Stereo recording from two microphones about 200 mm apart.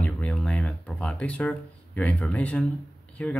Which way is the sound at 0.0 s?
5° left (ahead or behind).